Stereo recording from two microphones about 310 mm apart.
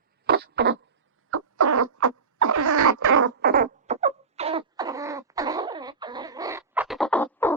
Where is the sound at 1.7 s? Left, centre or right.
Right.